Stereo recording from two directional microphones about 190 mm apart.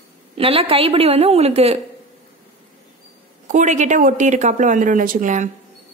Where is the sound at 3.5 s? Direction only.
40° right (ahead or behind).